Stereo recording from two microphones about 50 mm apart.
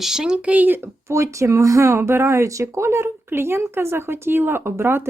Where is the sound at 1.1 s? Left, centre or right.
Right.